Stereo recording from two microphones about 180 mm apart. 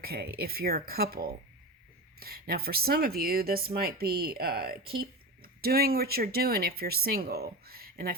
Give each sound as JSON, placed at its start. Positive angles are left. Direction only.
{"t": 0.0, "sound": "speech", "side_deg": -55}